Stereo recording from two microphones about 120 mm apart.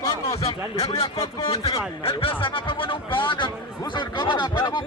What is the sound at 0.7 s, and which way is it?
Speech, 55° left (ahead or behind).